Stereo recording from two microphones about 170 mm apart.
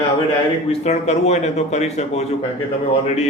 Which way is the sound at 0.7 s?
40° left (ahead or behind).